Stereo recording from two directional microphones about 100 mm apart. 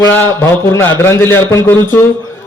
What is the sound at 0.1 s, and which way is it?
A man's voice, 20° left (ahead or behind).